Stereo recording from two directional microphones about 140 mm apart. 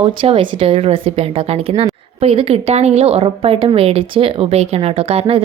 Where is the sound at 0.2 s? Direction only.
45° right (ahead or behind).